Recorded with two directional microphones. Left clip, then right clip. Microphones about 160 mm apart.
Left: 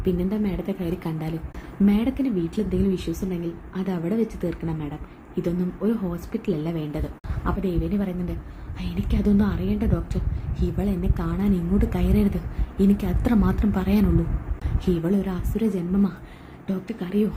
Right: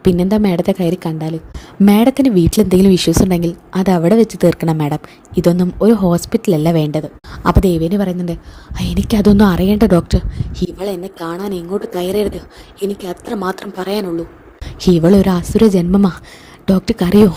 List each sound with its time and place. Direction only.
0.0 s a woman's voice: 55° right (ahead or behind); by 1.4 s 35° right (ahead or behind)
1.8 s a woman's voice: 60° right (ahead or behind); by 11.9 s 45° right (ahead or behind)
13.1 s a woman's voice: 45° right (ahead or behind)
15.0 s speech: 60° right (ahead or behind)